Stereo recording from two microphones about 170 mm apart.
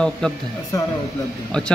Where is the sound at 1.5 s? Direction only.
5° left (ahead or behind).